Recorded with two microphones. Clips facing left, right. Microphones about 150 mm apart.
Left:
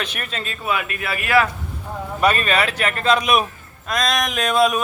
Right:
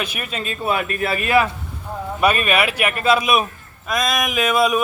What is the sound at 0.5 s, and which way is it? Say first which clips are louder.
Speech: right 3 dB; 35° right (ahead or behind).